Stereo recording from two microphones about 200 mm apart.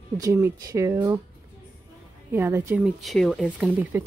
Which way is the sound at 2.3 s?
10° right (ahead or behind).